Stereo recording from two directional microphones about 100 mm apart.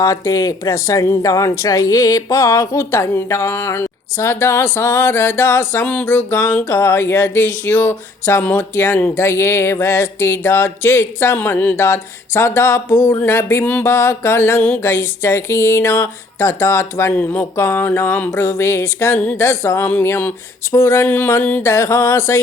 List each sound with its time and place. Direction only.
0.0 s speech: 35° left (ahead or behind)